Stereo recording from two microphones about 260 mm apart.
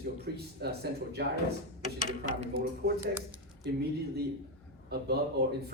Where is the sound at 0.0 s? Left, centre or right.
Right.